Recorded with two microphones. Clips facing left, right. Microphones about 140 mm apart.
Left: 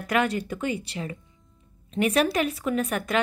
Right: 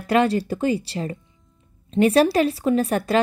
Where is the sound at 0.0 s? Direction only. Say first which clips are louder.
Right 6 dB; 30° right (ahead or behind).